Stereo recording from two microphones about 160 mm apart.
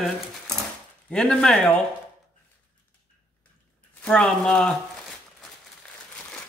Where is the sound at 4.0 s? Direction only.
5° left (ahead or behind).